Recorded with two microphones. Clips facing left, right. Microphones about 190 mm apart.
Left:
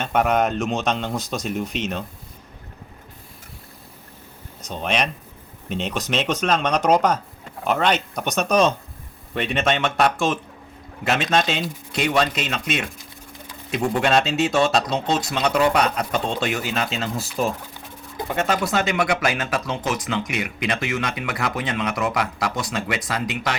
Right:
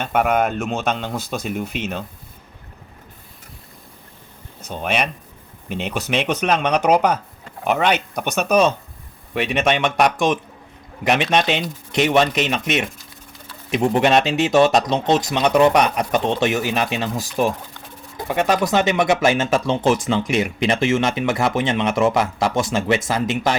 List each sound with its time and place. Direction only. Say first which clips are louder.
0.0 s speech: right 1 dB; 5° right (ahead or behind)
4.7 s speech: right 1 dB; 5° right (ahead or behind)
18.3 s speech: right 4 dB; 15° right (ahead or behind)